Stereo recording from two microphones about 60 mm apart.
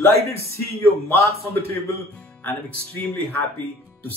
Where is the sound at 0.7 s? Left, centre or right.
Left.